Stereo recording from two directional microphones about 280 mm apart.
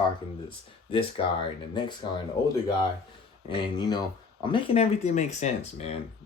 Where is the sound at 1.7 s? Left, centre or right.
Centre.